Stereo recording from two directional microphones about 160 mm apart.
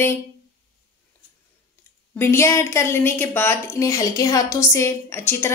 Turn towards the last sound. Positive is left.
turn(degrees=15)  # may be behind; listen again after turning